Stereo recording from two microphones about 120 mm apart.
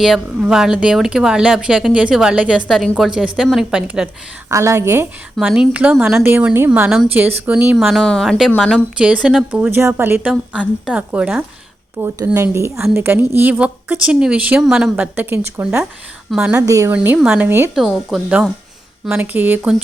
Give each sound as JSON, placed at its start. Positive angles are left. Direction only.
{"t": 0.0, "sound": "a woman's voice", "side_deg": -5}
{"t": 4.4, "sound": "a woman's voice", "side_deg": -25}
{"t": 5.4, "sound": "a woman's voice", "side_deg": -10}
{"t": 9.0, "sound": "a woman's voice", "side_deg": -10}
{"t": 16.6, "sound": "a woman's voice", "side_deg": -25}
{"t": 16.9, "sound": "a woman's voice", "side_deg": -15}
{"t": 17.7, "sound": "a woman's voice", "side_deg": 0}
{"t": 19.0, "sound": "a woman's voice", "side_deg": -15}